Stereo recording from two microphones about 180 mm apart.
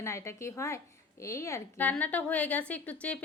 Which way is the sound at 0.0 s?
15° left (ahead or behind).